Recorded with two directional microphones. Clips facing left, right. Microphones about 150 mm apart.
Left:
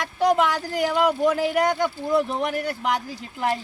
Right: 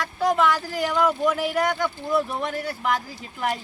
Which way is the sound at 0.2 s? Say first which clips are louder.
Left 1 dB; 20° left (ahead or behind).